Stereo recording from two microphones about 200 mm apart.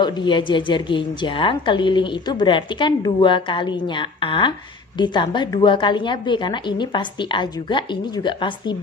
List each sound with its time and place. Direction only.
0.0 s a woman's voice: 25° left (ahead or behind)